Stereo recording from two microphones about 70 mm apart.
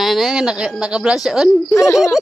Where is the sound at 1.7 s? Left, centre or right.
Left.